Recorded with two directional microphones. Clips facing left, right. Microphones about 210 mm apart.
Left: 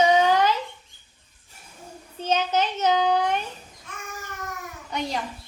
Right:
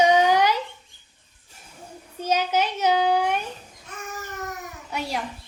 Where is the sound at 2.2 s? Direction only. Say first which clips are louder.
Even; 10° right (ahead or behind).